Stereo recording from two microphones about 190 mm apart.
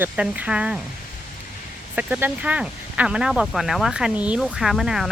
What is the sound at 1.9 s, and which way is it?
Speech, 10° right (ahead or behind).